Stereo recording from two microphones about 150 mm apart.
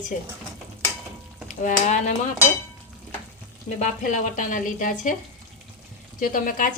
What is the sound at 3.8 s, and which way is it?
A woman's voice, 55° left (ahead or behind).